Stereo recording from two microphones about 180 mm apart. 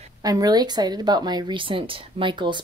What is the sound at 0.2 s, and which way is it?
Speech, 20° right (ahead or behind).